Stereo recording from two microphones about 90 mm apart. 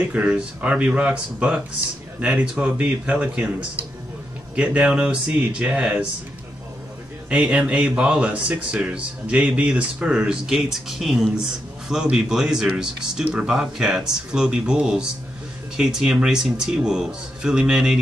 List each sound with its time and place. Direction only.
0.0 s speech: 15° right (ahead or behind)
7.2 s speech: 10° right (ahead or behind)